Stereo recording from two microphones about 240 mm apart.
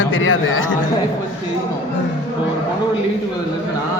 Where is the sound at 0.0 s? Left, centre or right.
Left.